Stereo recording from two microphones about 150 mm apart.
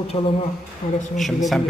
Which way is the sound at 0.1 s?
40° left (ahead or behind).